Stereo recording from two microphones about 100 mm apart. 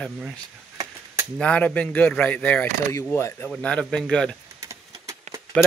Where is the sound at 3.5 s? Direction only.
10° left (ahead or behind).